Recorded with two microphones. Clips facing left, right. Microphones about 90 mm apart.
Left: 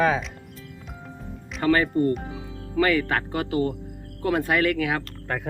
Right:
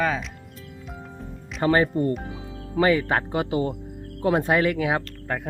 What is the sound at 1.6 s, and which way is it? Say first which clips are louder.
Speech: even; 25° right (ahead or behind).